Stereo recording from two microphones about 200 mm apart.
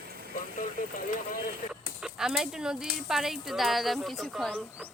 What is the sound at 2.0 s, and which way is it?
Speech, centre (ahead or behind).